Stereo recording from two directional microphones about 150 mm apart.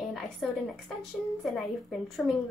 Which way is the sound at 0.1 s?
Centre (ahead or behind).